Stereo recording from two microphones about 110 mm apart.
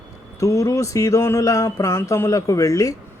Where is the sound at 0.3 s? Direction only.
30° left (ahead or behind).